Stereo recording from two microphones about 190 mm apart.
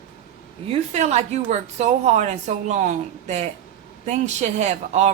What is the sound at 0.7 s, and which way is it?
A woman's voice, 35° right (ahead or behind).